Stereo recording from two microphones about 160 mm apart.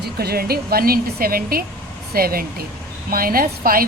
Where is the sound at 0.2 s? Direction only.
75° right (ahead or behind).